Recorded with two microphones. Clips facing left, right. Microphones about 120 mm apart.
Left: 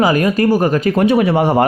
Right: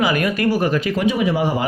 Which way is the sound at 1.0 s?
60° left (ahead or behind).